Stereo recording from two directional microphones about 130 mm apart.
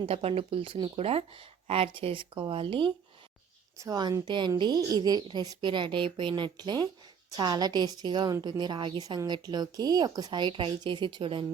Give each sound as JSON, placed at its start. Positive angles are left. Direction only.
{"t": 0.0, "sound": "speech", "side_deg": -50}
{"t": 3.8, "sound": "a woman's voice", "side_deg": -30}